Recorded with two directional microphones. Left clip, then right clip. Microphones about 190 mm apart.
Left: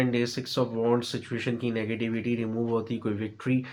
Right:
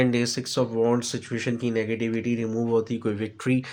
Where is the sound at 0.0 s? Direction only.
40° right (ahead or behind).